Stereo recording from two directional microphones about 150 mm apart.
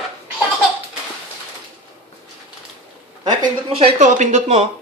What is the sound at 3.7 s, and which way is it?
Speech, 40° right (ahead or behind).